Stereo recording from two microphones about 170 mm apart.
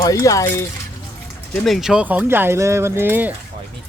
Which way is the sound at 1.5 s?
Centre (ahead or behind).